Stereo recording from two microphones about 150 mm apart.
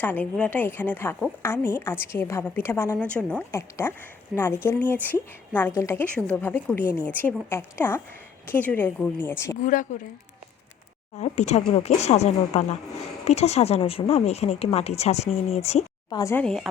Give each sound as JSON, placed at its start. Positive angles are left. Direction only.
{"t": 0.0, "sound": "a woman's voice", "side_deg": 10}
{"t": 9.6, "sound": "speech", "side_deg": 55}
{"t": 11.2, "sound": "speech", "side_deg": 50}
{"t": 16.0, "sound": "speech", "side_deg": 20}
{"t": 16.4, "sound": "speech", "side_deg": 5}